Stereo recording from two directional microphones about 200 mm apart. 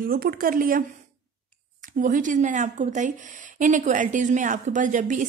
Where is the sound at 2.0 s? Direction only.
40° right (ahead or behind).